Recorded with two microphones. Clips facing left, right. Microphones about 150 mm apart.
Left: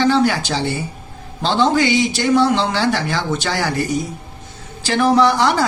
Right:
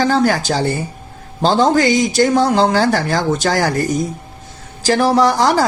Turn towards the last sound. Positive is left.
turn(degrees=-40)  # may be behind; listen again after turning